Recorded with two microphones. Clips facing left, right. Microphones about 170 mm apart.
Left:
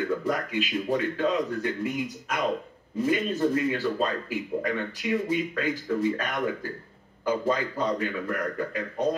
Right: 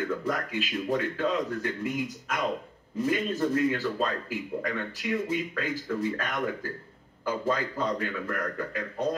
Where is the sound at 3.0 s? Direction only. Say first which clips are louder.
Left 2 dB; 10° left (ahead or behind).